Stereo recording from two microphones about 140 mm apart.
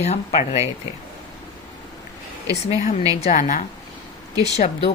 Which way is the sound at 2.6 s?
55° left (ahead or behind).